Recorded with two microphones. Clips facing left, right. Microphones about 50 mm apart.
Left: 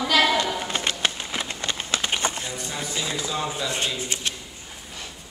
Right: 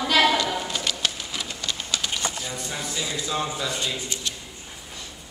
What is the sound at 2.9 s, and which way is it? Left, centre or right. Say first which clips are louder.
Speech: left 2 dB; left.